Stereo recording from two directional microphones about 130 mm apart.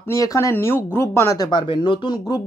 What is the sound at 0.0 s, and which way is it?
Speech, 25° left (ahead or behind).